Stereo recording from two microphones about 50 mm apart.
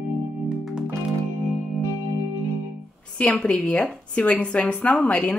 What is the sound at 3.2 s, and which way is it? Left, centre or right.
Speech, left.